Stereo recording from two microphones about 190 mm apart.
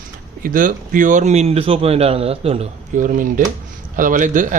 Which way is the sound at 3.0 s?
45° right (ahead or behind).